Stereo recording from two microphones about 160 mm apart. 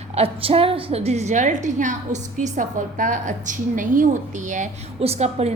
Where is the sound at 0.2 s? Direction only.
35° right (ahead or behind).